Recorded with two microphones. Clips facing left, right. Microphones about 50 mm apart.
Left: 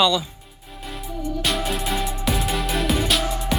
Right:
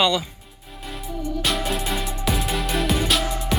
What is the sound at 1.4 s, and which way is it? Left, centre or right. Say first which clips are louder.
Music: even; centre.